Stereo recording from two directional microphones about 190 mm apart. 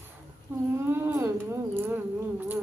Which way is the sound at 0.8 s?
10° right (ahead or behind).